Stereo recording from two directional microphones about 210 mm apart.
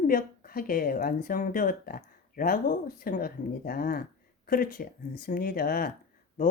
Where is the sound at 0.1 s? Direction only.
45° left (ahead or behind).